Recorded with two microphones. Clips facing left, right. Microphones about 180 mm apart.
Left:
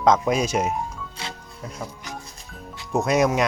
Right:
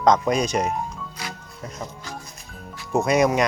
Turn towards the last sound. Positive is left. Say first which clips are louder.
# right 1 dB
turn(degrees=0)  # may be behind; listen again after turning